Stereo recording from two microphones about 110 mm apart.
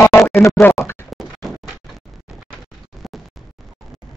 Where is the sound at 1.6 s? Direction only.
Centre (ahead or behind).